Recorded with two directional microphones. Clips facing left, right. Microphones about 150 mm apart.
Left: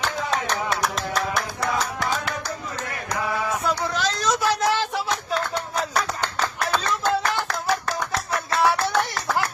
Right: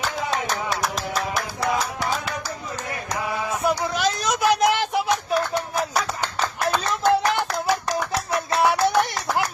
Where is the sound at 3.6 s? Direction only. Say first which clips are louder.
Right 2 dB; 15° right (ahead or behind).